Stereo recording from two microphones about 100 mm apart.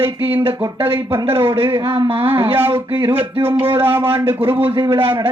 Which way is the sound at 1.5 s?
55° right (ahead or behind).